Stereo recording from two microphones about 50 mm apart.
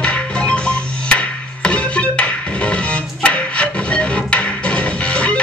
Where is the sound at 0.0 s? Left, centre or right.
Left.